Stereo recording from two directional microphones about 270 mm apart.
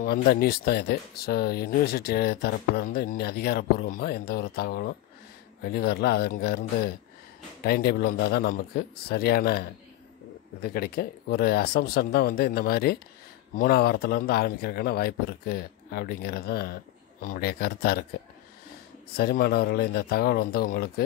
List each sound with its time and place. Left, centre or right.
0.0 s speech: left
19.1 s speech: left